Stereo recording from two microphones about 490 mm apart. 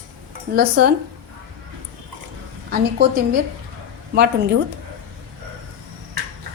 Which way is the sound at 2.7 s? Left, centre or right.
Centre.